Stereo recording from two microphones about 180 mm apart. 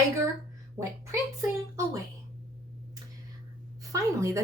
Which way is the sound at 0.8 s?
15° right (ahead or behind).